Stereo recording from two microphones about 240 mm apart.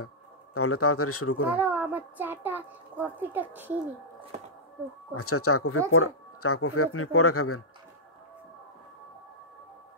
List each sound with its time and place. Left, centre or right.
0.6 s speech: left
1.6 s a child's voice: centre
5.1 s speech: left